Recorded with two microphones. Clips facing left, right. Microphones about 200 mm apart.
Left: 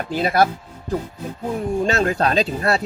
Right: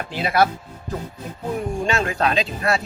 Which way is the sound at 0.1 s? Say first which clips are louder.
Left 2 dB; 40° left (ahead or behind).